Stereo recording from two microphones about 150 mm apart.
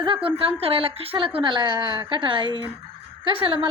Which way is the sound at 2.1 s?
35° right (ahead or behind).